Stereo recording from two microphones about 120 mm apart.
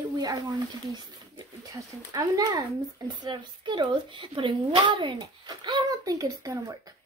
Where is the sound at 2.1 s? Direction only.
30° right (ahead or behind).